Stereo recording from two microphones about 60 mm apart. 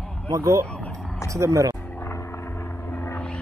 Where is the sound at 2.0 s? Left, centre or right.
Left.